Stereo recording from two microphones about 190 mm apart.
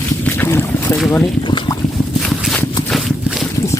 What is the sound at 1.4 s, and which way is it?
Boat, 25° left (ahead or behind).